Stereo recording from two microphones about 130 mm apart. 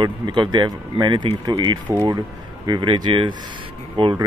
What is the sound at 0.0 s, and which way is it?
Speech, 35° right (ahead or behind).